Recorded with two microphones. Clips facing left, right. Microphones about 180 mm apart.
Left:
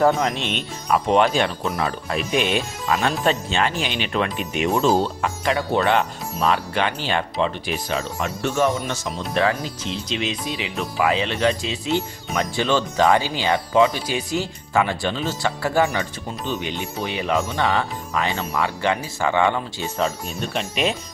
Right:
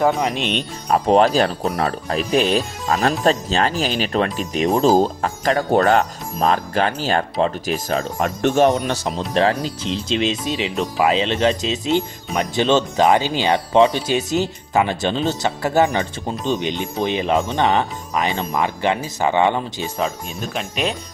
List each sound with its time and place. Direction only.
0.2 s speech: 15° right (ahead or behind)
0.5 s speech: 35° right (ahead or behind)
8.5 s speech: 35° right (ahead or behind)
20.0 s speech: centre (ahead or behind)